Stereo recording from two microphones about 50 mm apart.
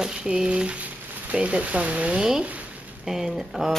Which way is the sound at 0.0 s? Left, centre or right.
Centre.